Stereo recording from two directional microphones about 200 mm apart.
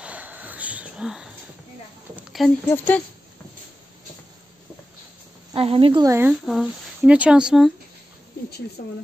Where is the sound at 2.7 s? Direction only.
10° left (ahead or behind).